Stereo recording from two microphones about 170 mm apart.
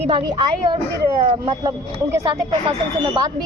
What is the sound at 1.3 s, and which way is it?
Speech, 25° right (ahead or behind).